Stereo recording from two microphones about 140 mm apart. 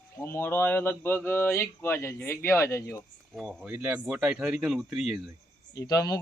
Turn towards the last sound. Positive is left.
turn(degrees=25)  # may be behind; listen again after turning